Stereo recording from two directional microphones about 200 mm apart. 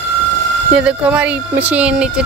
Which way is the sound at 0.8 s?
5° right (ahead or behind).